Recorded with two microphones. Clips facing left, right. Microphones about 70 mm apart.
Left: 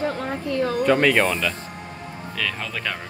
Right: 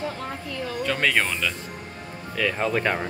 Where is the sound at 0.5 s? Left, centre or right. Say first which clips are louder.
Left 11 dB; left.